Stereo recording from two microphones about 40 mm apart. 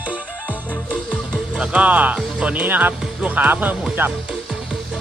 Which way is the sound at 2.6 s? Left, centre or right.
Right.